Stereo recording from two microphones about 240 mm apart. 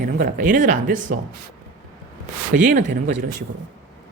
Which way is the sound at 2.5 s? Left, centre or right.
Right.